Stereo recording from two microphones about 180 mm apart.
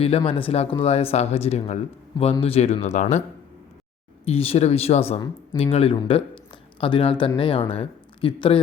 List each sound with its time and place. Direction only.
0.0 s speech: 30° left (ahead or behind)
4.3 s speech: 35° left (ahead or behind)